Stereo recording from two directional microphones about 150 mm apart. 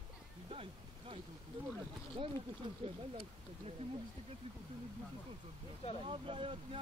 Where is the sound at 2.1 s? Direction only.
35° right (ahead or behind).